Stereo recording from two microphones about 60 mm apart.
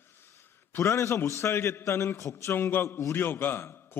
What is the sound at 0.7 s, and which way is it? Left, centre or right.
A man's voice, left.